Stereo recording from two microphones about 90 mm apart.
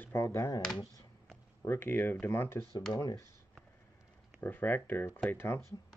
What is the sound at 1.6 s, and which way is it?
Speech, 25° left (ahead or behind).